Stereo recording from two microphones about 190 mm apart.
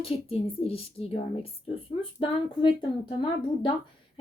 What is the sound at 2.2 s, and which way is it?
Speech, 25° left (ahead or behind).